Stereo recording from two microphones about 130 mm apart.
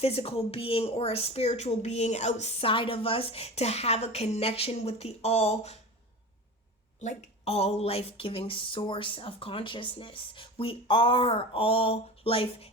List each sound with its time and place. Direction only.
0.0 s speech: 50° left (ahead or behind)
7.0 s speech: 60° left (ahead or behind)